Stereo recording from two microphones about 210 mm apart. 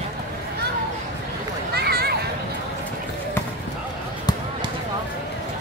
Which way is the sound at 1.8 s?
50° right (ahead or behind).